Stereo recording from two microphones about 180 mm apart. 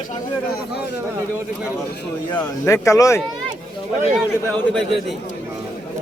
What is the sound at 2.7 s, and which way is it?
Speech, 15° left (ahead or behind).